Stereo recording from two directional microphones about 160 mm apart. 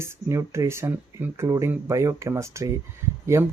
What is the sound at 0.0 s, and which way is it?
Speech, 20° right (ahead or behind).